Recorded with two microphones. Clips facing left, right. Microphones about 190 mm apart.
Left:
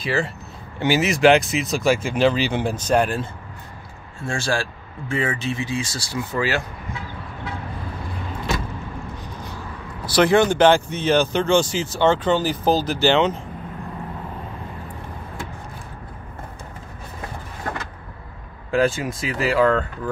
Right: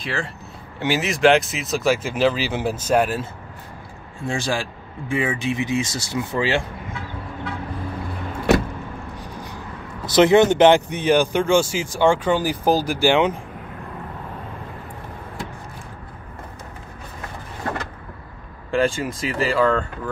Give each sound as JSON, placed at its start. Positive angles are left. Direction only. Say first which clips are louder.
{"t": 0.0, "sound": "speech", "louder": "left 4 dB", "side_deg": 5}
{"t": 4.2, "sound": "speech", "louder": "even", "side_deg": -15}
{"t": 10.0, "sound": "speech", "louder": "right 3 dB", "side_deg": -20}
{"t": 18.7, "sound": "speech", "louder": "left 1 dB", "side_deg": 5}